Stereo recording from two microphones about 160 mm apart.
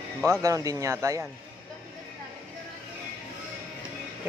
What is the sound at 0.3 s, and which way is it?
Speech, 20° right (ahead or behind).